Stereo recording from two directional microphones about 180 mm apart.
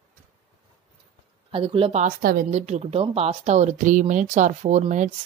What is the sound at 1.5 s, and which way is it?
Speech, 30° right (ahead or behind).